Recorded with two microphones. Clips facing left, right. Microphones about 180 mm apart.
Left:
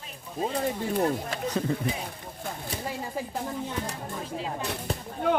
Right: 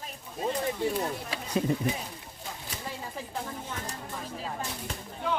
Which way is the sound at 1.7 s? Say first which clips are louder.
Even; 15° right (ahead or behind).